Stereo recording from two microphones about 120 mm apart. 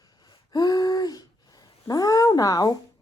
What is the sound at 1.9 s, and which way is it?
Speech, 30° left (ahead or behind).